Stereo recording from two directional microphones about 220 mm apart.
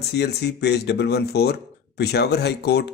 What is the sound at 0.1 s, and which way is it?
Speech, 50° left (ahead or behind).